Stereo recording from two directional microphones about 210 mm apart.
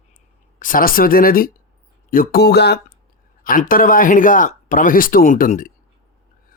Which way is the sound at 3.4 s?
40° left (ahead or behind).